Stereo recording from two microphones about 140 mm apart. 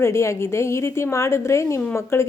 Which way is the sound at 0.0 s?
20° left (ahead or behind).